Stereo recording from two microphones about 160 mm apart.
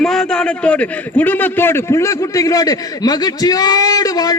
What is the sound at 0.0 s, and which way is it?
A man's voice, 5° left (ahead or behind).